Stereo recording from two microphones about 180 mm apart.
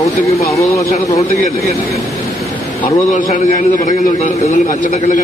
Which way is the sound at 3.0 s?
45° left (ahead or behind).